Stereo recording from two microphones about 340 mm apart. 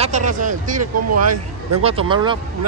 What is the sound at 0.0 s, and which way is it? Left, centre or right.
Speech, right.